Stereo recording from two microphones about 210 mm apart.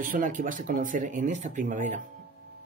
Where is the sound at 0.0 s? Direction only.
40° right (ahead or behind).